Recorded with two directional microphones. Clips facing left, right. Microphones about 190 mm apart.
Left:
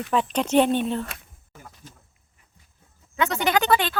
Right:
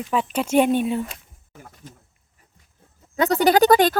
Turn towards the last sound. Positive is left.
turn(degrees=-40)  # may be behind; listen again after turning